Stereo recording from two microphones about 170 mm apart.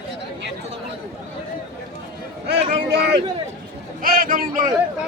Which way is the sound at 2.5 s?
75° right (ahead or behind).